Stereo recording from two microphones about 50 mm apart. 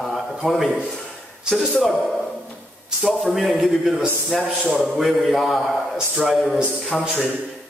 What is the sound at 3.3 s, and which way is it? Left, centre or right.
A man's voice, centre.